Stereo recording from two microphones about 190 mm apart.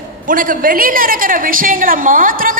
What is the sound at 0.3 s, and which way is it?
A woman's voice, 45° right (ahead or behind).